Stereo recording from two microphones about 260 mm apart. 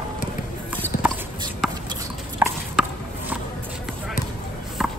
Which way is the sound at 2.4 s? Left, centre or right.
Centre.